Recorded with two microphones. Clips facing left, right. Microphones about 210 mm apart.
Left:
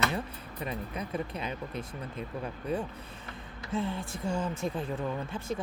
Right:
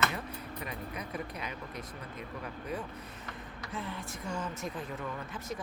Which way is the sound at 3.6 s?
25° left (ahead or behind).